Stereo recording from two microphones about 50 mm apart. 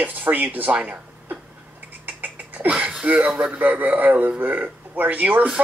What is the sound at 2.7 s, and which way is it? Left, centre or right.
Speech, right.